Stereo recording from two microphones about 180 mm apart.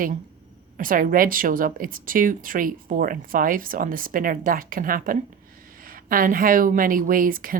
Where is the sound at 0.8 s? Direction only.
50° right (ahead or behind).